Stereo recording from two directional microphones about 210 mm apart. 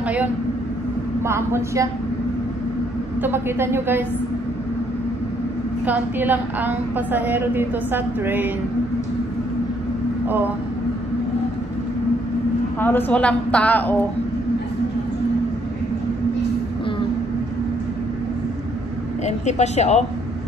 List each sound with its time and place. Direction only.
0.0 s a woman's voice: 5° right (ahead or behind)
3.2 s a woman's voice: 10° right (ahead or behind)
5.9 s a woman's voice: 10° right (ahead or behind)
10.2 s speech: 10° right (ahead or behind)
12.7 s a woman's voice: 10° left (ahead or behind)
19.2 s speech: 30° left (ahead or behind)